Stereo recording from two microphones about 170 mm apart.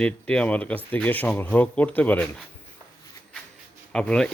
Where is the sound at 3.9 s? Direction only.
5° left (ahead or behind).